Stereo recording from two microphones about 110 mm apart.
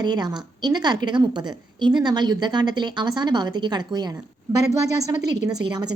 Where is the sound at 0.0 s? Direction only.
40° right (ahead or behind).